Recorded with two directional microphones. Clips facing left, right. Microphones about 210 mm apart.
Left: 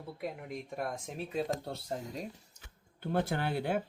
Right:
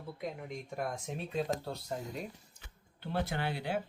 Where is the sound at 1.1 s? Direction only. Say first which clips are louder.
Even; centre (ahead or behind).